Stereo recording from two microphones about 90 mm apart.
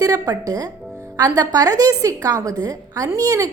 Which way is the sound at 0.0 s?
40° right (ahead or behind).